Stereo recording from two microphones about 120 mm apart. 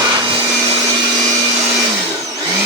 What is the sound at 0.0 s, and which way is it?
Vacuum cleaner, 40° right (ahead or behind).